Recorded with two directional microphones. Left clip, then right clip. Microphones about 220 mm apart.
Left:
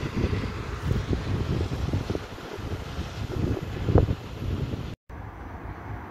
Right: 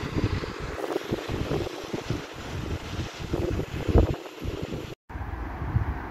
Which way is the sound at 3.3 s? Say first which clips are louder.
Right 2 dB; 45° left (ahead or behind).